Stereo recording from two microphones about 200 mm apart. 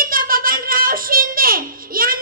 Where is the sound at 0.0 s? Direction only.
45° right (ahead or behind).